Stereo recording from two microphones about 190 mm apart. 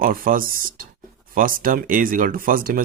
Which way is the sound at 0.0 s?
45° right (ahead or behind).